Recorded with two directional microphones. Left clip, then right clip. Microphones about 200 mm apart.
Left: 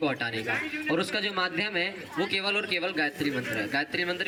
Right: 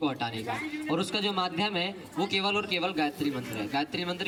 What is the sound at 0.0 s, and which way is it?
A man's voice, 50° right (ahead or behind).